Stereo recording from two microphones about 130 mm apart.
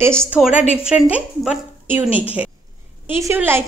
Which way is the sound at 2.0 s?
45° left (ahead or behind).